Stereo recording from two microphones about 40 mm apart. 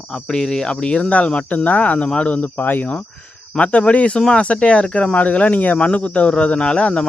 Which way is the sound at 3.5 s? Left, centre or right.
Left.